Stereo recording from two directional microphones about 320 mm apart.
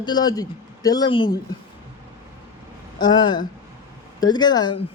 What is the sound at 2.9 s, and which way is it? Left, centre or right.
Speech, centre.